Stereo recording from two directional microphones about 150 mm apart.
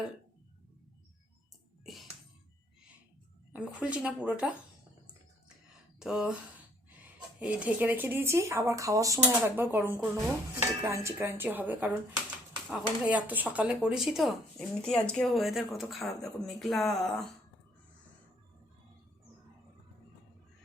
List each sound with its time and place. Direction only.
1.8 s music: centre (ahead or behind)
3.5 s speech: 10° right (ahead or behind)
6.0 s speech: 5° right (ahead or behind)